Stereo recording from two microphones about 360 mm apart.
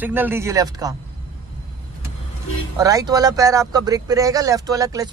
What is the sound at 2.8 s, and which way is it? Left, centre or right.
Speech, centre.